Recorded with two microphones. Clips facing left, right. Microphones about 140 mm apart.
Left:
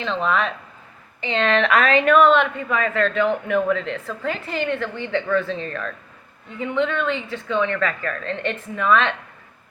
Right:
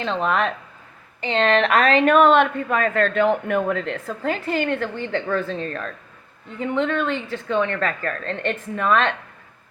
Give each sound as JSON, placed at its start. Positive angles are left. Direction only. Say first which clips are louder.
{"t": 0.3, "sound": "speech", "louder": "even", "side_deg": -50}
{"t": 1.2, "sound": "a woman's voice", "louder": "right 1 dB", "side_deg": -35}